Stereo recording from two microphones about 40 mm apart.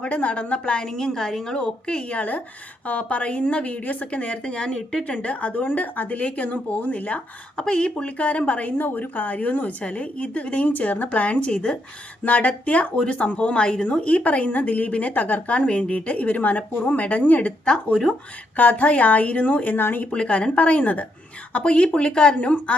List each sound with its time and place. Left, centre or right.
0.0 s a woman's voice: left; by 1.5 s centre
1.5 s a woman's voice: left
2.1 s a woman's voice: left
7.6 s a woman's voice: left
8.0 s a woman's voice: left
8.8 s a woman's voice: left
10.7 s a woman's voice: left
12.2 s a woman's voice: left
18.5 s a woman's voice: left
19.7 s speech: left
20.1 s a woman's voice: left
21.6 s a woman's voice: left